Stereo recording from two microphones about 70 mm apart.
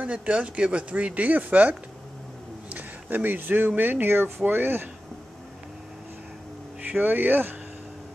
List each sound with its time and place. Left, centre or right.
0.0 s speech: centre
6.8 s speech: right